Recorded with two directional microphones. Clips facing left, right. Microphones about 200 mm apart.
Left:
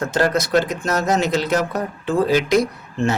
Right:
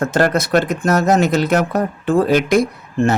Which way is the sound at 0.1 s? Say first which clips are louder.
Even; 55° right (ahead or behind).